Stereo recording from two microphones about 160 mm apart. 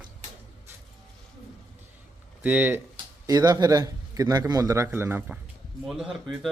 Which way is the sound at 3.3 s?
25° right (ahead or behind).